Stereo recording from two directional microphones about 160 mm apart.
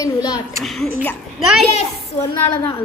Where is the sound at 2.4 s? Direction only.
35° left (ahead or behind).